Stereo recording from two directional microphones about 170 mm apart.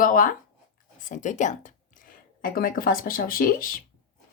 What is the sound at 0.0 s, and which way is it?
Speech, 50° left (ahead or behind).